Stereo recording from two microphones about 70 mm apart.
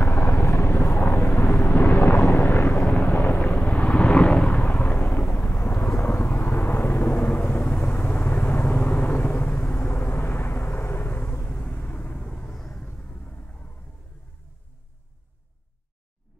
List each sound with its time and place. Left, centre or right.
0.0 s vehicle: left; by 3.9 s centre
3.9 s vehicle: centre
4.5 s a sound: centre
6.2 s vehicle: left; by 12.8 s centre